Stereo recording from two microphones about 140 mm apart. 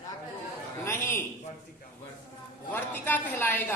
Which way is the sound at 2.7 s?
15° left (ahead or behind).